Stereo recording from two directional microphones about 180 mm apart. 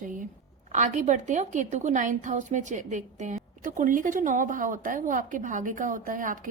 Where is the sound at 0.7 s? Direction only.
40° right (ahead or behind).